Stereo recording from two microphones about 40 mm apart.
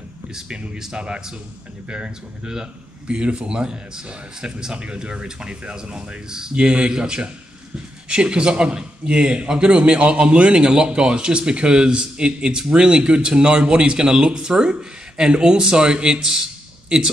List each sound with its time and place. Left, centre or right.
0.3 s speech: centre
1.0 s a man's voice: right
6.2 s a man's voice: centre